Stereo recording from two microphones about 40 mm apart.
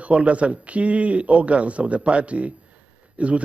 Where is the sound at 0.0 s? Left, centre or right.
Right.